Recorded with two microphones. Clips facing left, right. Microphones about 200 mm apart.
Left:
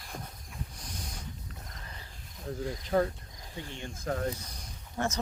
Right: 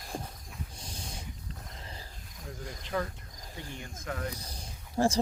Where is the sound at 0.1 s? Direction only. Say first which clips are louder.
Right 4 dB; 30° right (ahead or behind).